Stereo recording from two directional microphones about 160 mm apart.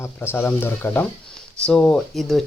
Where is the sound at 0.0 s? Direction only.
15° left (ahead or behind).